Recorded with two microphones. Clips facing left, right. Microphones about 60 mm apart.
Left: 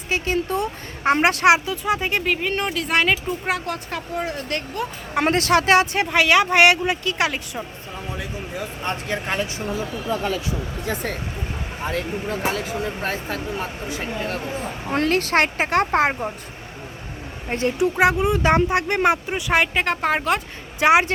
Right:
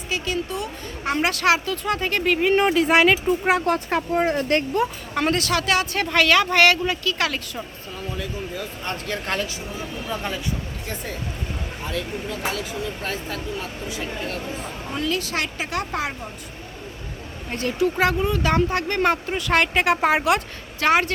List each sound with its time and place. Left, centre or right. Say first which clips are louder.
0.1 s speech: left 4 dB; left; by 2.5 s centre
2.5 s speech: right 6 dB; centre
3.7 s speech: right 6 dB; right
5.1 s speech: left 5 dB; left
6.1 s speech: left 1 dB; centre
11.8 s speech: left 4 dB; left
17.5 s speech: left 2 dB; left; by 19.8 s centre
19.8 s speech: right 2 dB; centre
20.7 s speech: left 3 dB; centre